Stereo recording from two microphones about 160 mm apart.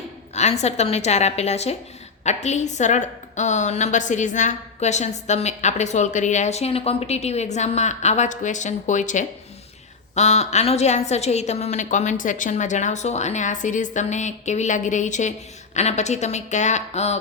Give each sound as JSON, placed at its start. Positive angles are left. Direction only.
{"t": 0.3, "sound": "a woman's voice", "side_deg": 45}